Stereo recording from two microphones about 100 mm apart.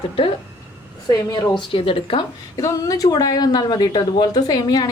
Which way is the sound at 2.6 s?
35° left (ahead or behind).